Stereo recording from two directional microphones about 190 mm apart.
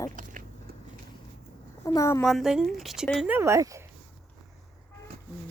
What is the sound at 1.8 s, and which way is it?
Speech, 15° left (ahead or behind).